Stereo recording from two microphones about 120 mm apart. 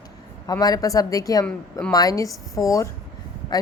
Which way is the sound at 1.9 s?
30° left (ahead or behind).